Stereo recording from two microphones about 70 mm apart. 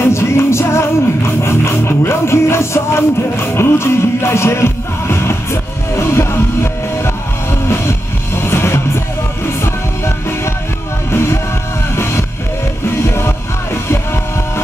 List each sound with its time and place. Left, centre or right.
0.0 s music: left